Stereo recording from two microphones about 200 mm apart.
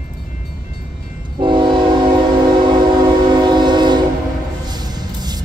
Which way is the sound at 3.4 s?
20° right (ahead or behind).